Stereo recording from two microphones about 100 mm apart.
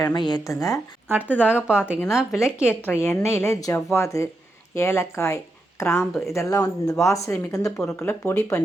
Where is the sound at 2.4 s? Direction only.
25° left (ahead or behind).